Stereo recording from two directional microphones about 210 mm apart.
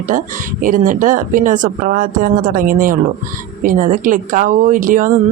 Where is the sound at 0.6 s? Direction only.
40° right (ahead or behind).